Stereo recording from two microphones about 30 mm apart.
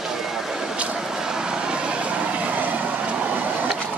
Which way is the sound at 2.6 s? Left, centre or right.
Right.